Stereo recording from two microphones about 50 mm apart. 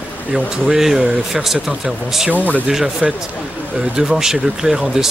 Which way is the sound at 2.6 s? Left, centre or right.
Centre.